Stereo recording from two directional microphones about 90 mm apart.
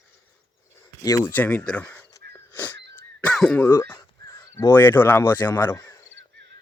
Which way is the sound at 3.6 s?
35° left (ahead or behind).